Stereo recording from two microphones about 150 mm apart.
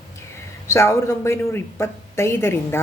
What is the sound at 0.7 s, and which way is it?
Speech, 20° left (ahead or behind).